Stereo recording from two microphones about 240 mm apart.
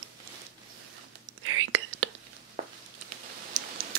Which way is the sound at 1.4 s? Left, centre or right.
Right.